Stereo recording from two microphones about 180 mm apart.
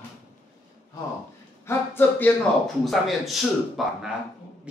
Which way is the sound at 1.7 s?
10° left (ahead or behind).